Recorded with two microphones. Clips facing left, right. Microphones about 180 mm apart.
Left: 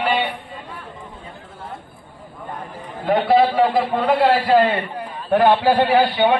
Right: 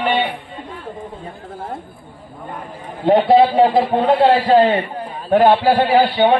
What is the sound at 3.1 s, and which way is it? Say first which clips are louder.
A man's voice: right 4 dB; 30° right (ahead or behind).